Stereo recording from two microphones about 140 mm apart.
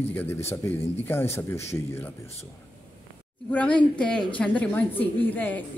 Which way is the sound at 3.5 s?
10° left (ahead or behind).